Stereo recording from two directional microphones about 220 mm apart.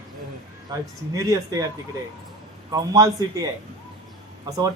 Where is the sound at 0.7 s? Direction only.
15° right (ahead or behind).